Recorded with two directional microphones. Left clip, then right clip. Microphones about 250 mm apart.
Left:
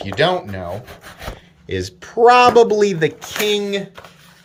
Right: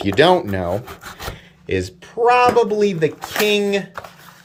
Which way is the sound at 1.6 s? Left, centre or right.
Centre.